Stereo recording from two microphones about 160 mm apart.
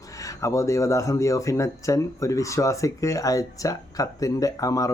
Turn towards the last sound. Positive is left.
turn(degrees=20)  # may be behind; listen again after turning